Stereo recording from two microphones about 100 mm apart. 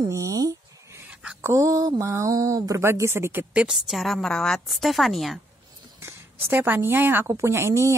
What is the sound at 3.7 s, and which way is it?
Speech, centre (ahead or behind).